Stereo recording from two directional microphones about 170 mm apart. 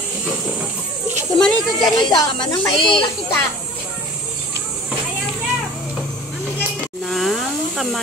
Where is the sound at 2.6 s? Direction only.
Centre (ahead or behind).